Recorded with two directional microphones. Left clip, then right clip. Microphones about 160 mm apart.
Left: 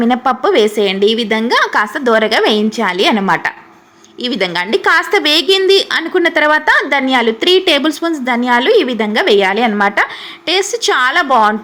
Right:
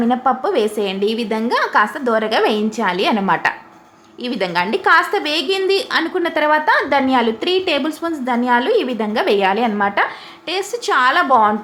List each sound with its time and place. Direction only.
0.0 s a woman's voice: 20° left (ahead or behind)